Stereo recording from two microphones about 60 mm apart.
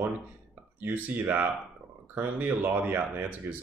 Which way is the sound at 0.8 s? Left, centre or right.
Right.